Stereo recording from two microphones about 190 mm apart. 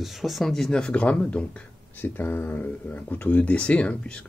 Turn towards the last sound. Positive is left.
turn(degrees=5)  # may be behind; listen again after turning